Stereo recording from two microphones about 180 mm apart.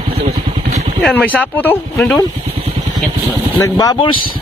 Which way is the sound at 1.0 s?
10° left (ahead or behind).